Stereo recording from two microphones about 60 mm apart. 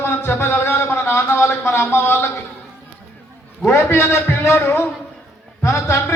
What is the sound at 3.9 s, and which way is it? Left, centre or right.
Music, left.